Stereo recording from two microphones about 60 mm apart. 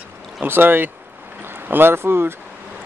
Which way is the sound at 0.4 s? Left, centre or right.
Right.